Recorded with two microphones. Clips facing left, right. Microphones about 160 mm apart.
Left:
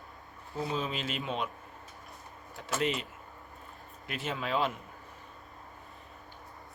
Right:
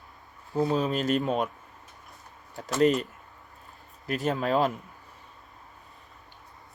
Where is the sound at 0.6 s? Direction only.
40° right (ahead or behind).